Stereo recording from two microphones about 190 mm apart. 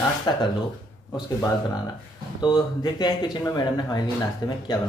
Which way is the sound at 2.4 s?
20° left (ahead or behind).